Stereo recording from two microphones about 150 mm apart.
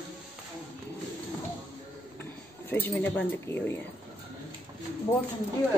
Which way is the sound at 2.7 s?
15° left (ahead or behind).